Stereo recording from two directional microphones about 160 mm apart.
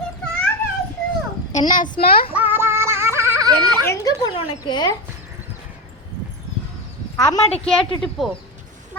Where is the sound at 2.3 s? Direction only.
10° right (ahead or behind).